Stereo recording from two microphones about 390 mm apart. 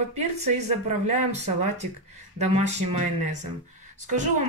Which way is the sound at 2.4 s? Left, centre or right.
Centre.